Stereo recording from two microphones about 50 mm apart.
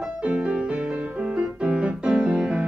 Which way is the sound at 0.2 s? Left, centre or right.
Right.